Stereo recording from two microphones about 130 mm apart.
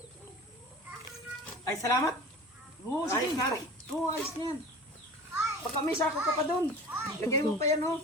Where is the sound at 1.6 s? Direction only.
25° left (ahead or behind).